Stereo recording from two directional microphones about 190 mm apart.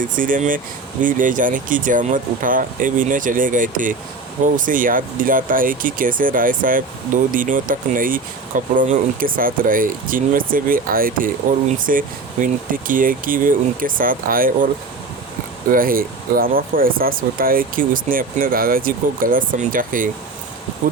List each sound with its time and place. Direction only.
0.0 s speech: 45° right (ahead or behind)
15.7 s speech: 50° right (ahead or behind)